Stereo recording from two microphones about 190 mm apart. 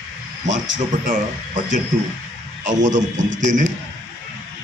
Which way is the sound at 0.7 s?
40° right (ahead or behind).